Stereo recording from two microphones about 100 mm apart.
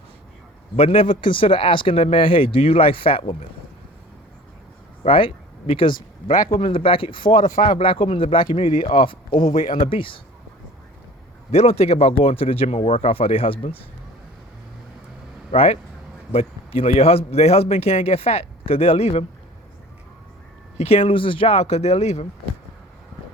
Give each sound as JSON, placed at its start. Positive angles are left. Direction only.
{"t": 0.8, "sound": "speech", "side_deg": 80}
{"t": 5.0, "sound": "speech", "side_deg": 65}
{"t": 9.5, "sound": "speech", "side_deg": 75}
{"t": 11.5, "sound": "speech", "side_deg": 90}
{"t": 15.5, "sound": "a man's voice", "side_deg": 80}
{"t": 20.7, "sound": "a man's voice", "side_deg": 85}